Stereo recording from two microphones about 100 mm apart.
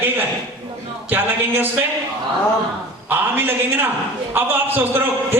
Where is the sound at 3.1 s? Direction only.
20° right (ahead or behind).